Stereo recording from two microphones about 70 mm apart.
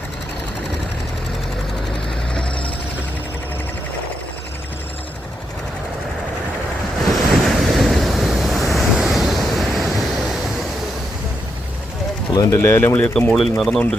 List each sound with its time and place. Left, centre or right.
7.2 s waves: centre
12.3 s speech: left
12.5 s speech: left
13.0 s speech: centre
13.3 s speech: centre